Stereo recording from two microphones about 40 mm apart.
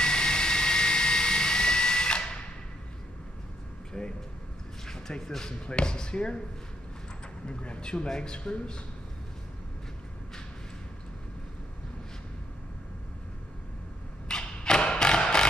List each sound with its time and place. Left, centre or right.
0.0 s vehicle: left
4.0 s a sound: centre
5.2 s speech: centre
5.7 s a man's voice: left
7.4 s a man's voice: left
14.2 s thump: centre